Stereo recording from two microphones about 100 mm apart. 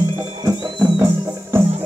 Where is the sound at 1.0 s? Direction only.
25° right (ahead or behind).